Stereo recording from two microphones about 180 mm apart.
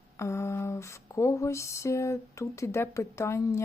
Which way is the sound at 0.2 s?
15° left (ahead or behind).